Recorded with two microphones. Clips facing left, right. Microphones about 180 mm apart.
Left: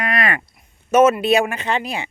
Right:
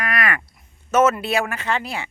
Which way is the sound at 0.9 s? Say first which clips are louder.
Left 4 dB; 15° left (ahead or behind).